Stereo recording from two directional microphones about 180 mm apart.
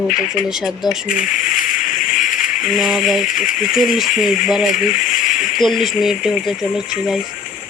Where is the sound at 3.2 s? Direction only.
45° left (ahead or behind).